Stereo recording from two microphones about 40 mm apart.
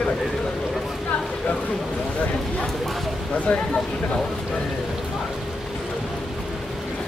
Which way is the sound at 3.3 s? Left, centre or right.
Left.